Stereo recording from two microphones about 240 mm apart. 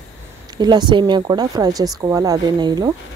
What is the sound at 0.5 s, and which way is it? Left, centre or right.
Speech, centre.